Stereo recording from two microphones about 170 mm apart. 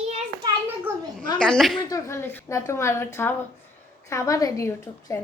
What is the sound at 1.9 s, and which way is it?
A woman's voice, 15° left (ahead or behind).